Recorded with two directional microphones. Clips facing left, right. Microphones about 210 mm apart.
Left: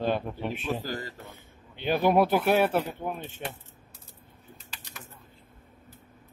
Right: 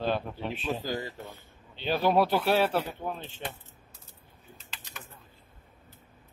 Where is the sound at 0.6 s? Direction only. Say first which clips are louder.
Right 3 dB; 15° right (ahead or behind).